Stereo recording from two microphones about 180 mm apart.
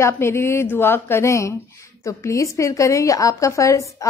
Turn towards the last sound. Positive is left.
turn(degrees=15)  # may be behind; listen again after turning